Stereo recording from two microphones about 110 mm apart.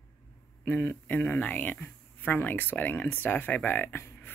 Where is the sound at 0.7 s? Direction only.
15° left (ahead or behind).